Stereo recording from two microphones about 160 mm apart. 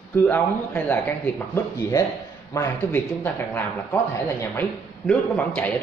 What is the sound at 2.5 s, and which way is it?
A man's voice, 15° left (ahead or behind).